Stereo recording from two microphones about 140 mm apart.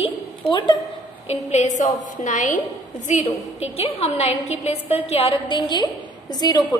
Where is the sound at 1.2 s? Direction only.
50° left (ahead or behind).